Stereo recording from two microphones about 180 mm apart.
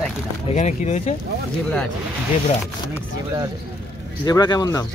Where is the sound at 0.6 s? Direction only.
40° left (ahead or behind).